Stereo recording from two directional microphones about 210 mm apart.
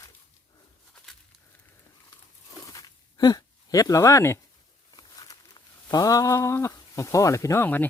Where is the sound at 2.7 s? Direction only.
15° left (ahead or behind).